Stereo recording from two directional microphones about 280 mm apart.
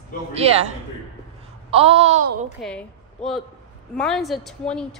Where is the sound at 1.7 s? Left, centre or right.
Right.